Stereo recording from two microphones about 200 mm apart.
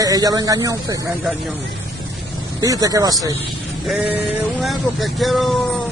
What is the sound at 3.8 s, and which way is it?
Speech, 5° right (ahead or behind).